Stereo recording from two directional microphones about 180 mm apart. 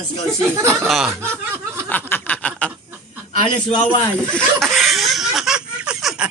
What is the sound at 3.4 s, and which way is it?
Speech, 25° left (ahead or behind).